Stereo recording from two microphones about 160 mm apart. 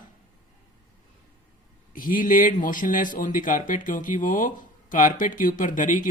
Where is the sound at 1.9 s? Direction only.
55° left (ahead or behind).